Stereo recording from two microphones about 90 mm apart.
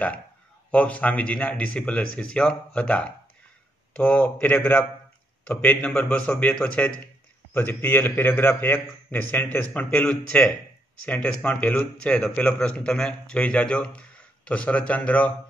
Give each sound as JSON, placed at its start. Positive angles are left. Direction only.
{"t": 0.7, "sound": "a man's voice", "side_deg": 15}
{"t": 7.5, "sound": "a man's voice", "side_deg": 20}